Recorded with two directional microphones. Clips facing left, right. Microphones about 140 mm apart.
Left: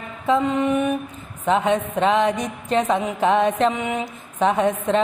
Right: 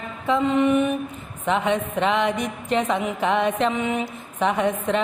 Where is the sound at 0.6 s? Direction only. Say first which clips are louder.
Right 1 dB; 15° left (ahead or behind).